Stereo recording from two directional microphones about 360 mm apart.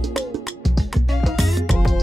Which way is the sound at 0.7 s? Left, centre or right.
Centre.